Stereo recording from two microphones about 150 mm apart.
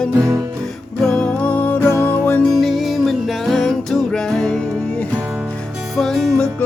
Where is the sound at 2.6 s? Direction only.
Centre (ahead or behind).